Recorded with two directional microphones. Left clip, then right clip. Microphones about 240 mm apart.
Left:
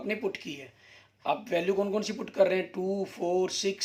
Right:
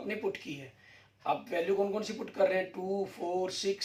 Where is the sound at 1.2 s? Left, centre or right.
Left.